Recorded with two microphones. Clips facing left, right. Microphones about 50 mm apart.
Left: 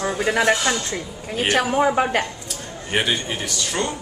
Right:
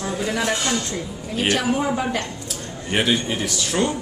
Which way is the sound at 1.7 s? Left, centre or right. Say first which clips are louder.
Left 4 dB; left.